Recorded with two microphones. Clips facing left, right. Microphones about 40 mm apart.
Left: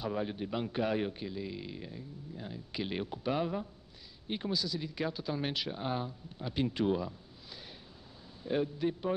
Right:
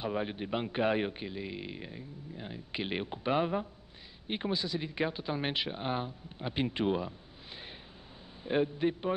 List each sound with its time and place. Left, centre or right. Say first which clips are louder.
0.0 s a man's voice: right 1 dB; right